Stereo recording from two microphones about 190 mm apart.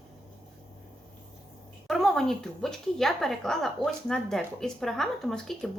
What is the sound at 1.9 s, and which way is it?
A woman's voice, centre (ahead or behind).